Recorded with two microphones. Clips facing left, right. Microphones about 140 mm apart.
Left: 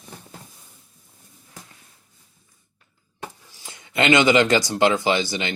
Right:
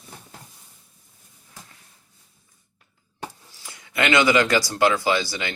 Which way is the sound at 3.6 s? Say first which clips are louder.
Left 4 dB; 20° left (ahead or behind).